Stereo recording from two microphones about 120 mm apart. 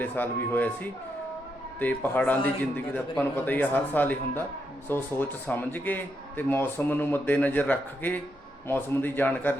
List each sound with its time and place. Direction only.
0.0 s a man's voice: 15° left (ahead or behind)